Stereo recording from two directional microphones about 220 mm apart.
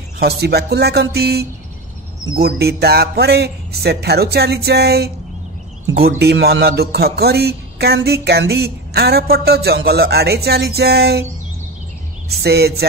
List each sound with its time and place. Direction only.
0.2 s speech: 45° right (ahead or behind)
12.3 s speech: 45° right (ahead or behind)